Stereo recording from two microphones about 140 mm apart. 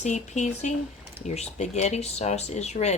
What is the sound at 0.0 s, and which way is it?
A woman's voice, 60° left (ahead or behind).